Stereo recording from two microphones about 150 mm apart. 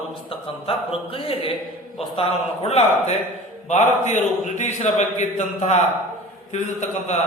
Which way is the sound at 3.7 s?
50° left (ahead or behind).